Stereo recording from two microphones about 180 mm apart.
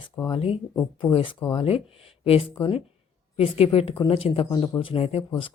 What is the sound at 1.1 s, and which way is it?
Speech, 30° left (ahead or behind).